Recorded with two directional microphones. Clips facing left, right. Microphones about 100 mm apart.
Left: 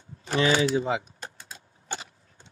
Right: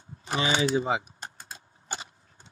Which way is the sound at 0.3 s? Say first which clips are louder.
Left 4 dB; 20° right (ahead or behind).